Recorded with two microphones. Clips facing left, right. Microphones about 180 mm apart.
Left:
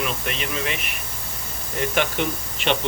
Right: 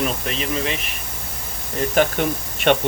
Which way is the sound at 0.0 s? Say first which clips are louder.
Right 3 dB; 35° right (ahead or behind).